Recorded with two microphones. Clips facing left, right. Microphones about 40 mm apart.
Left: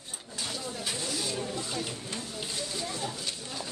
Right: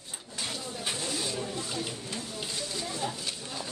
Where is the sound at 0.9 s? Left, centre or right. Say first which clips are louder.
Right 1 dB; right.